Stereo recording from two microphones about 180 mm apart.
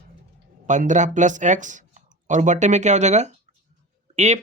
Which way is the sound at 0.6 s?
45° right (ahead or behind).